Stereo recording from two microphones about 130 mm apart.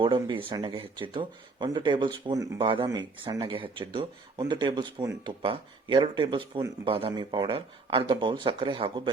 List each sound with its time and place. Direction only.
0.0 s speech: 40° right (ahead or behind)
2.6 s speech: 40° right (ahead or behind)